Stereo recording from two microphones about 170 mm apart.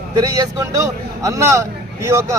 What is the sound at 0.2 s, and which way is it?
A man's voice, 20° right (ahead or behind).